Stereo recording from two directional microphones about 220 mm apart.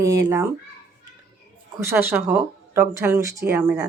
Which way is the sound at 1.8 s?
10° right (ahead or behind).